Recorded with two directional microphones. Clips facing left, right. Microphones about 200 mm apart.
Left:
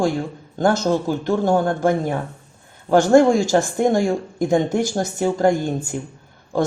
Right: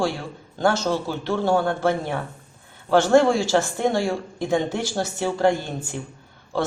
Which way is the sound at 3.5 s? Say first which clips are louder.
Left 4 dB; 15° left (ahead or behind).